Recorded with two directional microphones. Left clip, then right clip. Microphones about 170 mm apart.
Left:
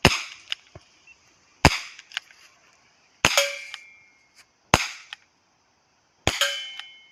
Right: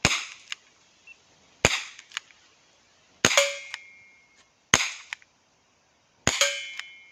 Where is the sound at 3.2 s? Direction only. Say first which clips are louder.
Left 1 dB; 15° right (ahead or behind).